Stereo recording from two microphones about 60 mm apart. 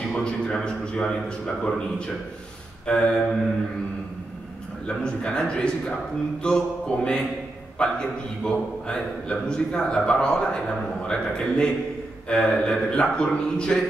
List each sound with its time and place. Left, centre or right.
0.1 s a man's voice: centre
4.8 s a man's voice: centre